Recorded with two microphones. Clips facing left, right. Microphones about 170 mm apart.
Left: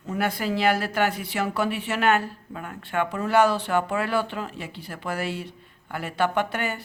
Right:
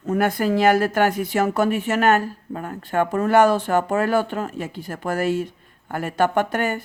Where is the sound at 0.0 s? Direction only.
50° right (ahead or behind).